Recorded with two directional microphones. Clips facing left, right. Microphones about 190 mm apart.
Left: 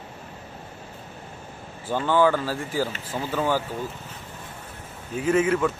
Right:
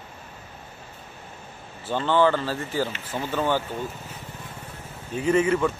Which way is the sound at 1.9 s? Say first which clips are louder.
Even; 10° left (ahead or behind).